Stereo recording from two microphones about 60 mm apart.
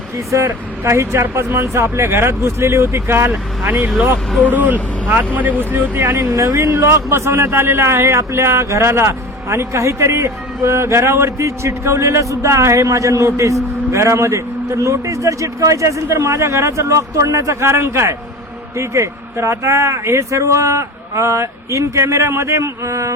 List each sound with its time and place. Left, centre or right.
0.3 s speech: right
6.3 s speech: right